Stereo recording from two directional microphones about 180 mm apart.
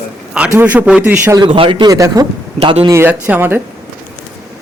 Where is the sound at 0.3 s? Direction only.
5° right (ahead or behind).